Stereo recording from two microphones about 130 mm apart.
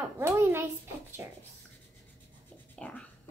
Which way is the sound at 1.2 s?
20° right (ahead or behind).